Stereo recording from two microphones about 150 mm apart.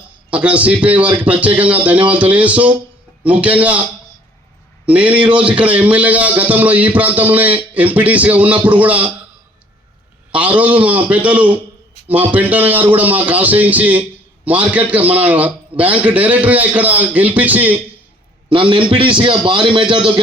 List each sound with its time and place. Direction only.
0.3 s a man's voice: 10° right (ahead or behind)
4.9 s a man's voice: 10° right (ahead or behind)
10.3 s a man's voice: 10° right (ahead or behind)
18.4 s a man's voice: 35° right (ahead or behind)